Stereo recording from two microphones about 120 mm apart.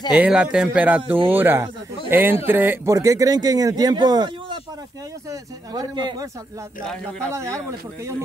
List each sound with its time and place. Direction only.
0.2 s a man's voice: 10° right (ahead or behind); by 6.2 s 35° right (ahead or behind)
6.9 s speech: 10° left (ahead or behind)
7.3 s a man's voice: 25° right (ahead or behind)